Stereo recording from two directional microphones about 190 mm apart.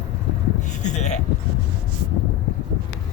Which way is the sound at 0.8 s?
35° left (ahead or behind).